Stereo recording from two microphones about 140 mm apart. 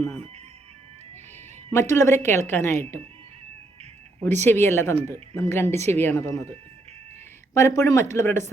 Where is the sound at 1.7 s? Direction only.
20° left (ahead or behind).